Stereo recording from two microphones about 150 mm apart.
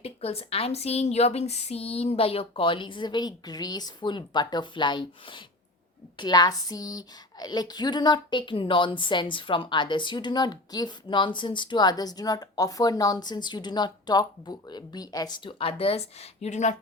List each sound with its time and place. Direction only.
0.0 s speech: 40° left (ahead or behind)
16.4 s speech: 50° left (ahead or behind)